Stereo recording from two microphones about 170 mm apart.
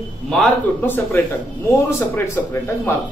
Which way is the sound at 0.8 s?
10° left (ahead or behind).